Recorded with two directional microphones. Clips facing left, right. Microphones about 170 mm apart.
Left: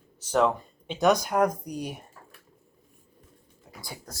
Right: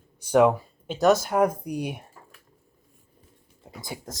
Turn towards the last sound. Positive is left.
turn(degrees=-20)  # may be behind; listen again after turning